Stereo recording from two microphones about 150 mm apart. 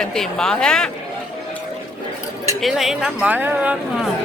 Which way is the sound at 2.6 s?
Centre (ahead or behind).